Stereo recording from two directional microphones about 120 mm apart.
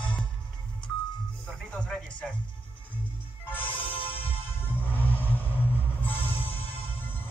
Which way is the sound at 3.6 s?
45° left (ahead or behind).